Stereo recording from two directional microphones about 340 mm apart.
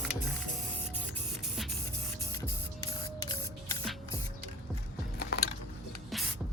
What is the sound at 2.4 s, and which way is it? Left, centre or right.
Printer, centre.